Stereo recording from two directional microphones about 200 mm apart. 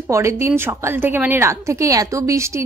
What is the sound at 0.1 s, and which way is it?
A woman's voice, 15° right (ahead or behind).